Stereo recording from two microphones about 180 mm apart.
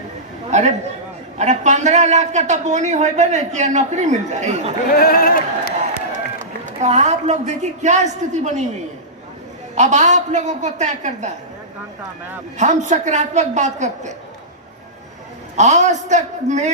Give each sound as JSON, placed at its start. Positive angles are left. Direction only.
{"t": 0.5, "sound": "a man's voice", "side_deg": -40}
{"t": 4.9, "sound": "speech", "side_deg": 55}
{"t": 6.4, "sound": "a man's voice", "side_deg": -40}
{"t": 9.7, "sound": "a man's voice", "side_deg": -40}
{"t": 12.5, "sound": "a man's voice", "side_deg": -40}
{"t": 15.5, "sound": "a man's voice", "side_deg": -40}